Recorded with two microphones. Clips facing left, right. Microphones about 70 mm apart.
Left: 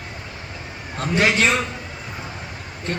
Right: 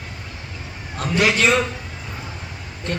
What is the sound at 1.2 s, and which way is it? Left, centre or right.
Speech, left.